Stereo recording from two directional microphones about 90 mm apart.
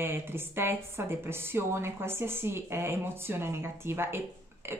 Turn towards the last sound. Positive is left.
turn(degrees=-25)  # may be behind; listen again after turning